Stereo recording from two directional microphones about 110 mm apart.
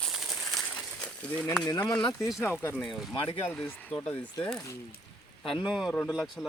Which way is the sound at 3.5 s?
15° left (ahead or behind).